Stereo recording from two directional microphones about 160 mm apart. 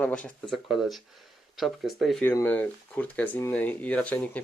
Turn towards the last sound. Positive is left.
turn(degrees=10)  # may be behind; listen again after turning